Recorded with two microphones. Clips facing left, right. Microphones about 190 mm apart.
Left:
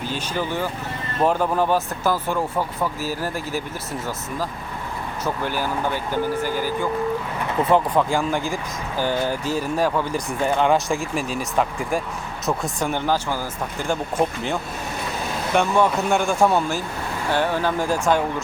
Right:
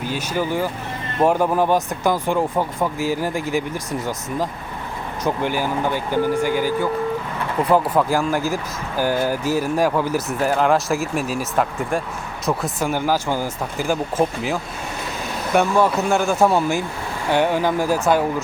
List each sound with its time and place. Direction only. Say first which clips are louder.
0.1 s speech: right 4 dB; 10° right (ahead or behind)
5.2 s speech: right 4 dB; 15° right (ahead or behind)
13.7 s speech: right 2 dB; 5° right (ahead or behind)